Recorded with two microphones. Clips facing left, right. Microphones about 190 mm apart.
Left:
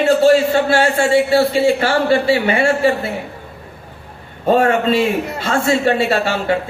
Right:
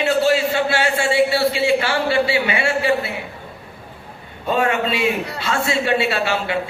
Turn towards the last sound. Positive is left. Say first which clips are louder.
# left 4 dB
turn(degrees=45)  # may be behind; listen again after turning